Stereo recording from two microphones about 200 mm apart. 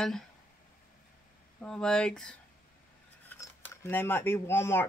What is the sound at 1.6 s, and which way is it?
Speech, 5° left (ahead or behind).